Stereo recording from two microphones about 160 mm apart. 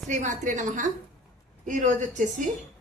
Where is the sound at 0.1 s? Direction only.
50° right (ahead or behind).